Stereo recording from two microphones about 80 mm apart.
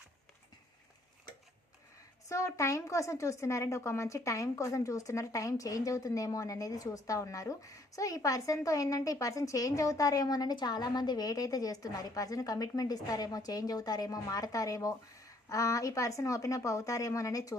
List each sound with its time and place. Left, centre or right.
2.3 s speech: left